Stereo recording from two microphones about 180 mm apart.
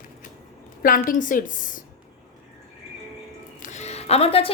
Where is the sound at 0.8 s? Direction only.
50° left (ahead or behind).